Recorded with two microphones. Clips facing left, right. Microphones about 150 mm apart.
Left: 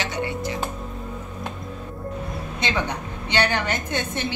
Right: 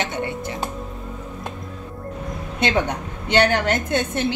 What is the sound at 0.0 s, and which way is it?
Speech, 55° right (ahead or behind).